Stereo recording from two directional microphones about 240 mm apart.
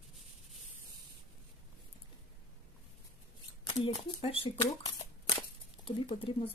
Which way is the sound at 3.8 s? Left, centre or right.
Left.